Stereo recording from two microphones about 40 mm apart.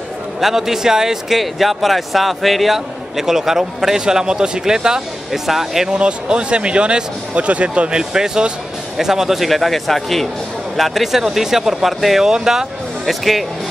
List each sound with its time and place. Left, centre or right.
0.4 s a man's voice: centre
1.4 s a man's voice: centre
5.9 s speech: right
8.0 s a man's voice: centre
9.5 s a man's voice: centre
13.0 s speech: centre